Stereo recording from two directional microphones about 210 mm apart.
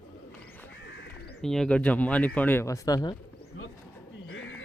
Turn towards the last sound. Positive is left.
turn(degrees=65)  # may be behind; listen again after turning